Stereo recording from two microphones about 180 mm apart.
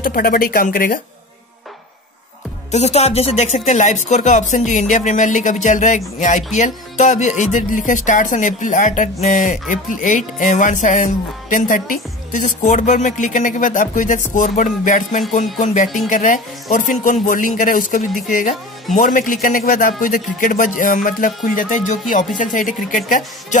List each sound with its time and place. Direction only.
0.0 s speech: 55° left (ahead or behind)
2.7 s speech: 35° left (ahead or behind)